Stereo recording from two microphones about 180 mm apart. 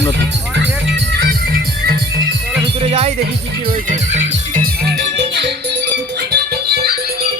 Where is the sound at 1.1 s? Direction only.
60° right (ahead or behind).